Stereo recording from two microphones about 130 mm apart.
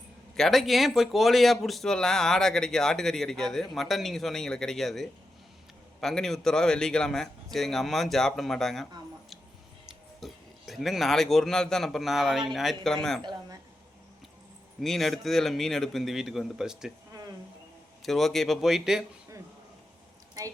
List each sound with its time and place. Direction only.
0.3 s speech: centre (ahead or behind)
14.8 s speech: centre (ahead or behind)
17.1 s insect: 25° right (ahead or behind)
18.0 s speech: centre (ahead or behind)